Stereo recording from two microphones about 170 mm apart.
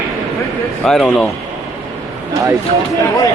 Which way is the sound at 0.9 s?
5° left (ahead or behind).